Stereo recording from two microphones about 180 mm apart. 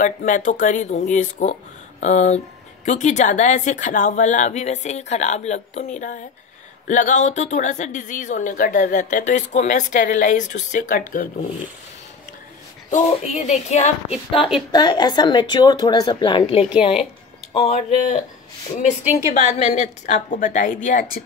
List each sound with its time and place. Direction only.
0.0 s a woman's voice: 45° left (ahead or behind)
12.9 s speech: 40° left (ahead or behind)
14.7 s speech: 25° left (ahead or behind); by 18.2 s 40° left (ahead or behind)
19.3 s a woman's voice: 40° left (ahead or behind)